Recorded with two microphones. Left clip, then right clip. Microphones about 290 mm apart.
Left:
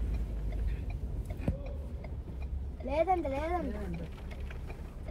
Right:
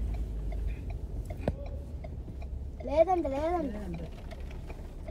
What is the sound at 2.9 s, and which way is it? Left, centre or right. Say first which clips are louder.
Speech: right 4 dB; right.